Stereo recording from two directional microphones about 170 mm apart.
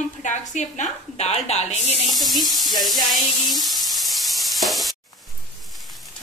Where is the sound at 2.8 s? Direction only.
Centre (ahead or behind).